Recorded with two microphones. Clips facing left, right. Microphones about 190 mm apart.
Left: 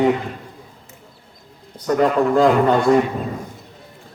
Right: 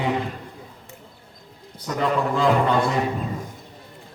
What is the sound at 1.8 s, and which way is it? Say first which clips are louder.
Speech: left 7 dB; 45° left (ahead or behind).